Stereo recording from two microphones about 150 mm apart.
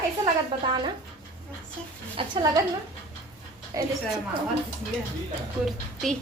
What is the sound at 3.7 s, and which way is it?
Speech, 20° right (ahead or behind).